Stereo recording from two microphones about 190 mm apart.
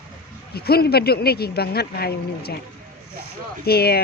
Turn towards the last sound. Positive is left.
turn(degrees=55)  # may be behind; listen again after turning